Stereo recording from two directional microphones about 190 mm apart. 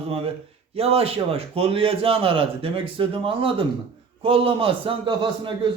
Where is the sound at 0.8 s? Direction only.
30° right (ahead or behind).